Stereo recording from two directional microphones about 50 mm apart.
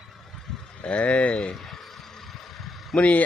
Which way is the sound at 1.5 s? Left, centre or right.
Centre.